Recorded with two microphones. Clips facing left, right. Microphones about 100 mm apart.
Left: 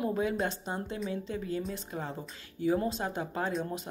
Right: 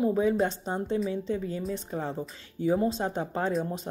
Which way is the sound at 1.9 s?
30° right (ahead or behind).